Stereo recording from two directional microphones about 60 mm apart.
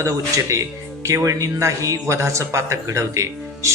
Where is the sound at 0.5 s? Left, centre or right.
Right.